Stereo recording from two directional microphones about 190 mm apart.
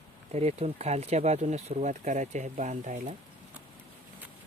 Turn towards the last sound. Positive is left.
turn(degrees=-40)  # may be behind; listen again after turning